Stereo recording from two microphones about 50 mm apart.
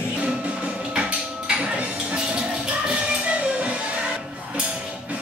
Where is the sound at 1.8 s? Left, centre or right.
Right.